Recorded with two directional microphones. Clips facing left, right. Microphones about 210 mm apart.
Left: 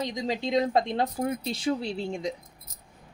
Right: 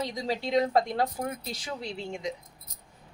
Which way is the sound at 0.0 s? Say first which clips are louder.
Left 2 dB; 20° left (ahead or behind).